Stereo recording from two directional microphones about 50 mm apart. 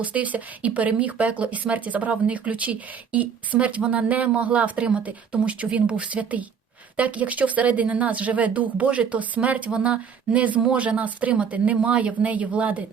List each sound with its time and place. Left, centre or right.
0.0 s speech: right